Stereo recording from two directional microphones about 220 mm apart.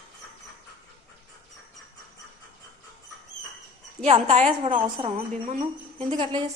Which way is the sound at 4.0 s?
30° right (ahead or behind).